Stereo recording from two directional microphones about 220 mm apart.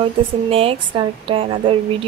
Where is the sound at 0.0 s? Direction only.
25° right (ahead or behind).